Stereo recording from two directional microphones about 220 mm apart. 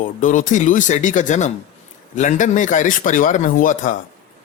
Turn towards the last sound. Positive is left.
turn(degrees=35)  # may be behind; listen again after turning